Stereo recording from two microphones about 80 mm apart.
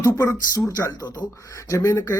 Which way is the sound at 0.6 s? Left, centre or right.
Left.